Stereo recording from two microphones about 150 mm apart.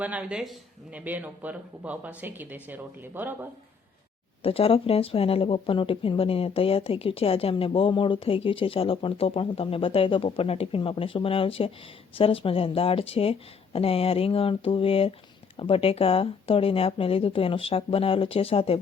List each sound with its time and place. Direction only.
0.0 s speech: 10° right (ahead or behind)
4.4 s speech: 40° left (ahead or behind)